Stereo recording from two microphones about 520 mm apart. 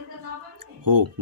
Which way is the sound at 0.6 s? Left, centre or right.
Right.